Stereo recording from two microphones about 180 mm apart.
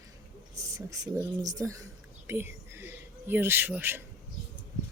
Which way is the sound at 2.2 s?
15° right (ahead or behind).